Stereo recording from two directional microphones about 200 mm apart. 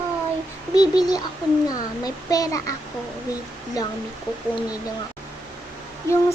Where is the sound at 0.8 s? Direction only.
20° left (ahead or behind).